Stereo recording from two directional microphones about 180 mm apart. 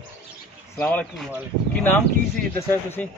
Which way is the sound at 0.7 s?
10° left (ahead or behind).